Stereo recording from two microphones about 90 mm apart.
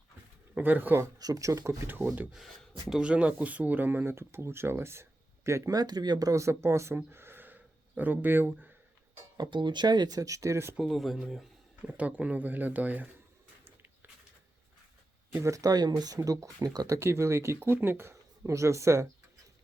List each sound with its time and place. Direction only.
0.5 s speech: 20° right (ahead or behind)
1.2 s speech: 40° right (ahead or behind)
2.9 s speech: 10° right (ahead or behind); by 5.7 s 30° right (ahead or behind)
5.7 s speech: 50° right (ahead or behind); by 8.7 s 20° right (ahead or behind)
9.4 s speech: 60° right (ahead or behind)
10.2 s speech: 40° right (ahead or behind)
10.8 s speech: centre (ahead or behind)
11.8 s speech: 15° right (ahead or behind)
15.3 s speech: 25° right (ahead or behind)
15.5 s speech: 45° right (ahead or behind)